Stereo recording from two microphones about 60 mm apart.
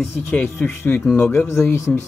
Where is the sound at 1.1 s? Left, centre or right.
Left.